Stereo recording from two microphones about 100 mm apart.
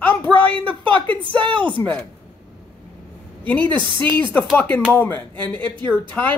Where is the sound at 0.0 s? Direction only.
20° left (ahead or behind).